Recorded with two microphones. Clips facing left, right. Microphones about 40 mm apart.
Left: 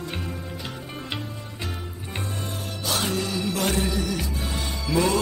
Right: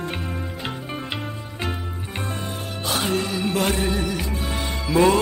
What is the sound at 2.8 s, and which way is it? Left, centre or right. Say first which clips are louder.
Music: right 3 dB; right.